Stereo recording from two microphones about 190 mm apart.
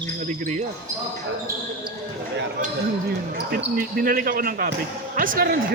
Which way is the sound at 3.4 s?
55° right (ahead or behind).